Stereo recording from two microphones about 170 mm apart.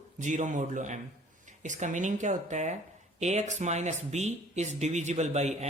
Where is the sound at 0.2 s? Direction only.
45° right (ahead or behind).